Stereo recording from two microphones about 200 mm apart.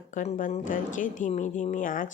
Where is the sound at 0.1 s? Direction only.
40° left (ahead or behind).